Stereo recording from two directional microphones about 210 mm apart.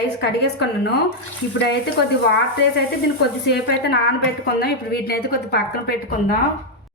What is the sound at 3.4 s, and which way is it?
A woman's voice, 50° left (ahead or behind).